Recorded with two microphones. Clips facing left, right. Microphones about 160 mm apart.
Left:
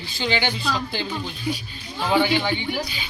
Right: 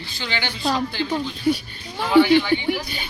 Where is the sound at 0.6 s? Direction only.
60° right (ahead or behind).